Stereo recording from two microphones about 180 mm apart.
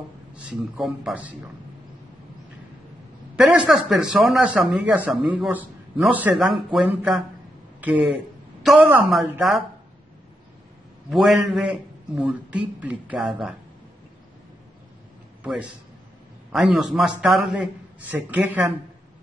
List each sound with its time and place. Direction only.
0.3 s speech: 5° right (ahead or behind)
3.3 s speech: 5° right (ahead or behind)
11.1 s speech: centre (ahead or behind)
15.4 s a man's voice: 5° right (ahead or behind)